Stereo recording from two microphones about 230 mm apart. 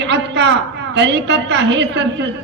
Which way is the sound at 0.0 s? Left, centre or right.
Right.